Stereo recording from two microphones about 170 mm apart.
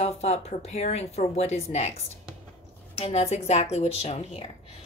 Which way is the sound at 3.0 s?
40° left (ahead or behind).